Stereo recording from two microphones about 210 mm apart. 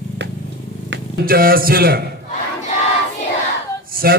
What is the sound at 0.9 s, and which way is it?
A man's voice, 45° right (ahead or behind).